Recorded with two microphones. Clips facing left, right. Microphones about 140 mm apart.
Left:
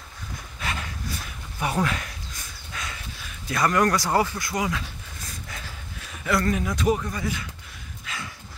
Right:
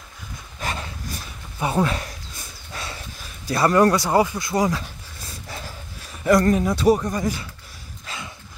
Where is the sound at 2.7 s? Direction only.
30° right (ahead or behind).